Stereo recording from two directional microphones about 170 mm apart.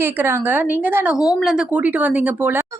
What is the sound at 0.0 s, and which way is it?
A woman's voice, 15° right (ahead or behind).